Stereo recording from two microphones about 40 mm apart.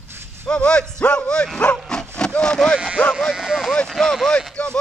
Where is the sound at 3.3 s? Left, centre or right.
Centre.